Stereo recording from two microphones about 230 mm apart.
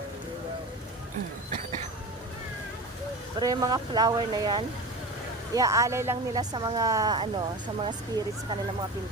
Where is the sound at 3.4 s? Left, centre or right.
Centre.